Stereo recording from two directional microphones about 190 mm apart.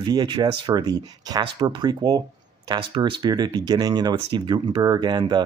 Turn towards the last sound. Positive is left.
turn(degrees=-20)  # may be behind; listen again after turning